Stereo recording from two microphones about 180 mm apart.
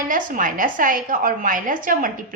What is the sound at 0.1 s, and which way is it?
A woman's voice, 45° right (ahead or behind).